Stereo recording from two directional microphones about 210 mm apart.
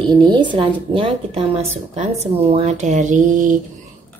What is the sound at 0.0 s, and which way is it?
A woman's voice, 20° right (ahead or behind).